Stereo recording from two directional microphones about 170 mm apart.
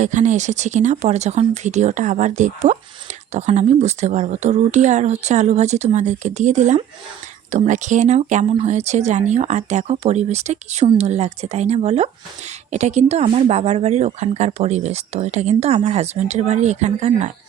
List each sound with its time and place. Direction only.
0.0 s speech: 45° right (ahead or behind)